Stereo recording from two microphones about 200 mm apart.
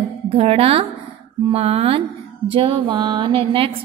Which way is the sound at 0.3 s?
30° right (ahead or behind).